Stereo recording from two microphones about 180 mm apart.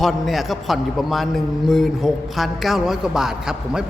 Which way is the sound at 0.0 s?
Centre (ahead or behind).